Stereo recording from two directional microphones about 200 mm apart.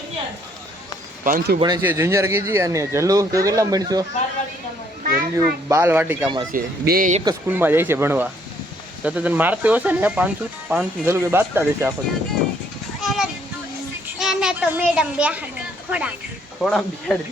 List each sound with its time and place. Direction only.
1.2 s speech: 45° right (ahead or behind)
1.5 s speech: 20° right (ahead or behind)
5.0 s speech: 50° right (ahead or behind)
5.6 s speech: 15° right (ahead or behind)
6.2 s speech: 20° right (ahead or behind)
6.5 s speech: 45° right (ahead or behind)
7.3 s speech: 10° right (ahead or behind)
13.0 s a sound: centre (ahead or behind)
14.2 s children playing: centre (ahead or behind)
15.9 s speech: 5° right (ahead or behind)